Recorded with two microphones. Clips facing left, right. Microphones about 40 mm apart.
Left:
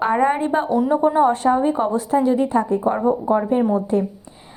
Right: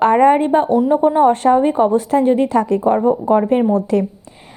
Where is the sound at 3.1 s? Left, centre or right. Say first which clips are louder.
Right 2 dB; right.